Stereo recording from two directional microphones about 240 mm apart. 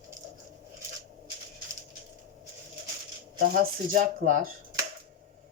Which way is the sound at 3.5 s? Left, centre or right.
Right.